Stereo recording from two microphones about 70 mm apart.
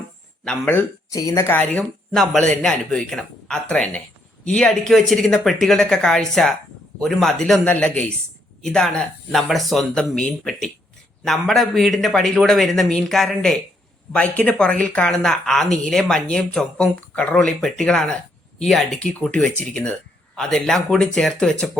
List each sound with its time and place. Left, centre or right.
0.6 s speech: left
1.1 s speech: left
1.5 s speech: left
1.8 s speech: centre
7.6 s speech: centre
14.1 s speech: centre